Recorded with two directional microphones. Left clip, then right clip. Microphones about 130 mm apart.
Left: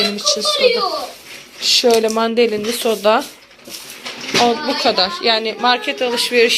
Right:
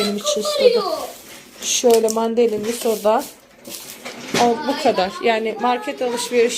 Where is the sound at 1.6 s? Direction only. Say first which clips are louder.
Left 5 dB; 20° right (ahead or behind).